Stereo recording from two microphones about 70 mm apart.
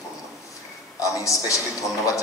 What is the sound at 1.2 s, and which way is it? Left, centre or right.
Speech, left.